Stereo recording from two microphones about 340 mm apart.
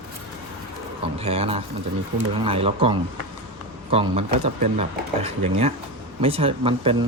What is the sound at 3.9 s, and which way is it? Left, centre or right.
Speech, centre.